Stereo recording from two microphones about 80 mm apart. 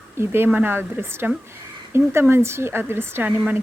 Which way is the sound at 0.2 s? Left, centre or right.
Right.